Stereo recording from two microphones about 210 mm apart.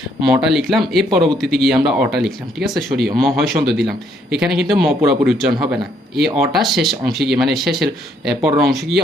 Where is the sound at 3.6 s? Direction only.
50° right (ahead or behind).